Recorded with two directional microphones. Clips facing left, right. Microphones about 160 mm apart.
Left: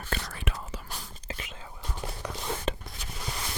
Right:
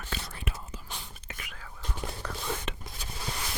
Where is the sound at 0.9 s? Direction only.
5° left (ahead or behind).